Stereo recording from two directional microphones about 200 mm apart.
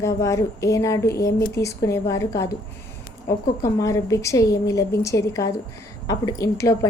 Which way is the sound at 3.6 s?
15° left (ahead or behind).